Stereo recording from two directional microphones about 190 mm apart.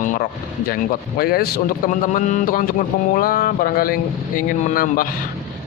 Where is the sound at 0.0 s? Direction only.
45° left (ahead or behind).